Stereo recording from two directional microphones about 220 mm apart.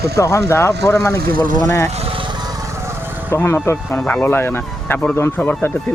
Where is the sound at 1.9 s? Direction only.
25° right (ahead or behind).